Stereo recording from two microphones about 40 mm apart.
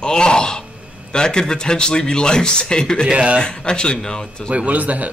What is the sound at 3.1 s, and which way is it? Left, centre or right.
Speech, right.